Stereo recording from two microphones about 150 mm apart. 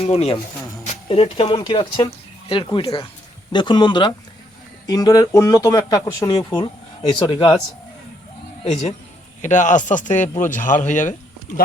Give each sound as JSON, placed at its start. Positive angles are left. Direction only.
{"t": 0.0, "sound": "speech", "side_deg": 45}
{"t": 9.4, "sound": "a man's voice", "side_deg": 55}